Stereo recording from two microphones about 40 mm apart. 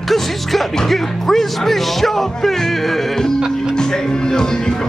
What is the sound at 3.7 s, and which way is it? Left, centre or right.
Speech, centre.